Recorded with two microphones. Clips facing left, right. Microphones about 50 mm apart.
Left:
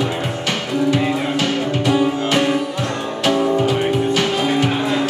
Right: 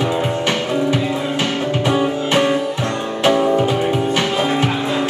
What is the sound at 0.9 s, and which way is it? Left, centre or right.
Music, right.